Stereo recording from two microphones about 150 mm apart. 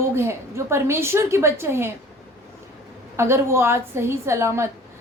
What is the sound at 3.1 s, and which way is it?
A woman's voice, 20° right (ahead or behind).